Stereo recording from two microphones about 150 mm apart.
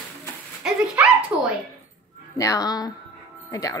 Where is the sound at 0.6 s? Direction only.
5° right (ahead or behind).